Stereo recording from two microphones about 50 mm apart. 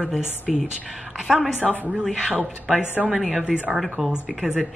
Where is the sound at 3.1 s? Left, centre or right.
Centre.